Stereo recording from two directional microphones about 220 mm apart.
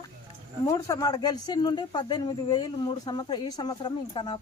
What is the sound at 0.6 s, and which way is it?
Speech, 15° left (ahead or behind).